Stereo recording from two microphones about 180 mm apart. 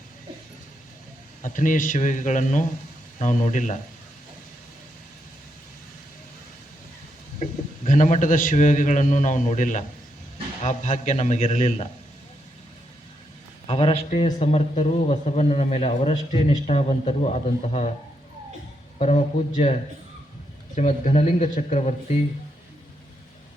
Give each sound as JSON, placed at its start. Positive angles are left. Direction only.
{"t": 1.4, "sound": "a man's voice", "side_deg": 45}
{"t": 7.9, "sound": "a man's voice", "side_deg": 45}
{"t": 13.7, "sound": "a man's voice", "side_deg": 30}
{"t": 18.9, "sound": "a man's voice", "side_deg": 40}
{"t": 20.7, "sound": "a man's voice", "side_deg": 40}